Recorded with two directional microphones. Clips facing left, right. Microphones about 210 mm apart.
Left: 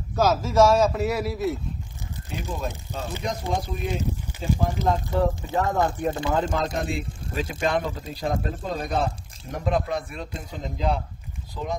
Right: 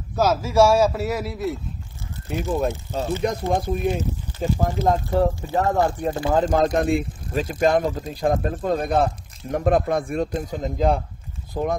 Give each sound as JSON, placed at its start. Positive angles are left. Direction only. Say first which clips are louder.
{"t": 0.1, "sound": "a man's voice", "louder": "right 1 dB", "side_deg": -5}
{"t": 2.7, "sound": "speech", "louder": "right 7 dB", "side_deg": 15}
{"t": 3.3, "sound": "speech", "louder": "right 3 dB", "side_deg": -55}